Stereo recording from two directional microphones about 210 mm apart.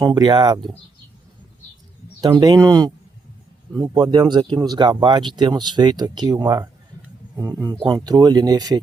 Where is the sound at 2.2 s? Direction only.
20° right (ahead or behind).